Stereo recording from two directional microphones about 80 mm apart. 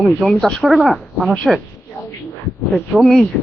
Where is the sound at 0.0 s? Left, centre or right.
Centre.